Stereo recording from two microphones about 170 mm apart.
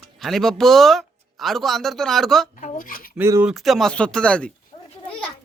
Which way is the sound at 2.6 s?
55° left (ahead or behind).